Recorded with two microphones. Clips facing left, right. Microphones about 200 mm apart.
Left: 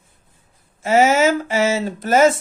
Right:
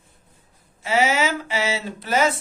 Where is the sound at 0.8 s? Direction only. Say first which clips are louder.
Left 6 dB; 45° left (ahead or behind).